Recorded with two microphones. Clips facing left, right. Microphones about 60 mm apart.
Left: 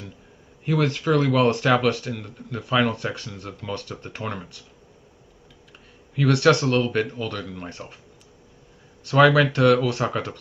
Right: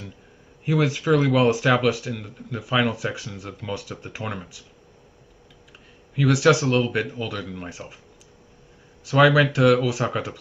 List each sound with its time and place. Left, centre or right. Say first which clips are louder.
0.7 s speech: right 1 dB; centre
6.1 s speech: even; centre
9.0 s speech: even; centre